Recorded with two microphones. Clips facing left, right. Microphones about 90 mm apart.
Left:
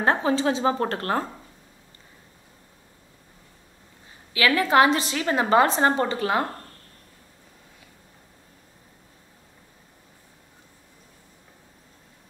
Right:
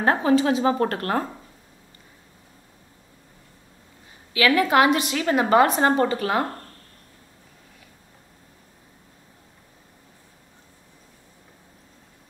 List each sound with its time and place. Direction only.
0.0 s a woman's voice: 30° left (ahead or behind)
4.6 s a woman's voice: 30° left (ahead or behind)